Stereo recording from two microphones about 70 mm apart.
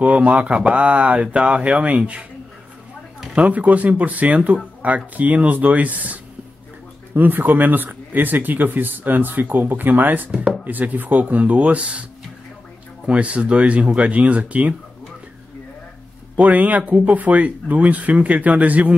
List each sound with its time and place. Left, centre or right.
0.0 s speech: centre
3.3 s speech: right
7.2 s speech: right
16.3 s speech: right